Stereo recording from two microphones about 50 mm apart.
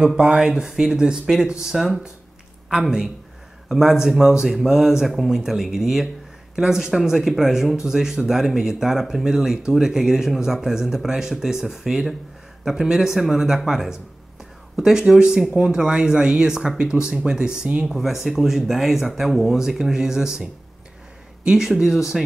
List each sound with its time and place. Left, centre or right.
0.1 s a man's voice: centre
21.5 s speech: centre